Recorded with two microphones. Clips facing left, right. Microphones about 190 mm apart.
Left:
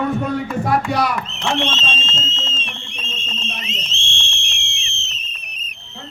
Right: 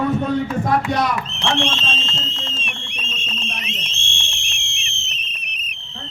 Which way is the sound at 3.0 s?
15° right (ahead or behind).